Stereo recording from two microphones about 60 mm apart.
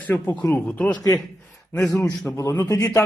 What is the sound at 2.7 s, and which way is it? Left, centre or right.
Speech, left.